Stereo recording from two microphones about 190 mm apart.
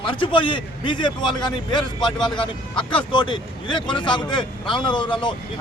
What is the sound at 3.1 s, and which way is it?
Speech, 25° left (ahead or behind).